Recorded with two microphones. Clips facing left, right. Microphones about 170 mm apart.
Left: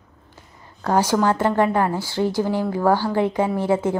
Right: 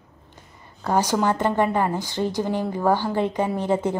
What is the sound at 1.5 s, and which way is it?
Speech, 10° right (ahead or behind).